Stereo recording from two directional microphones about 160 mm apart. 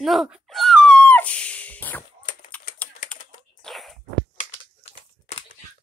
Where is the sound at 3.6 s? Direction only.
Centre (ahead or behind).